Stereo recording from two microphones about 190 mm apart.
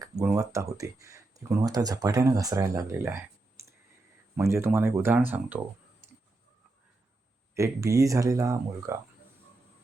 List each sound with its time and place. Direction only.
0.3 s speech: 15° right (ahead or behind)
4.4 s speech: 15° right (ahead or behind)
7.5 s speech: 15° right (ahead or behind)